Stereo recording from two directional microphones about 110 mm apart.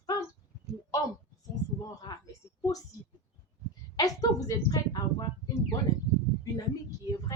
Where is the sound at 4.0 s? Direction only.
35° left (ahead or behind).